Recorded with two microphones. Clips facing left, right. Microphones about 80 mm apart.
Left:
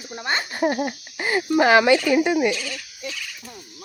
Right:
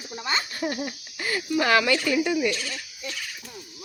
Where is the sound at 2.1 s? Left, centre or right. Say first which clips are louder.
Left 5 dB; left.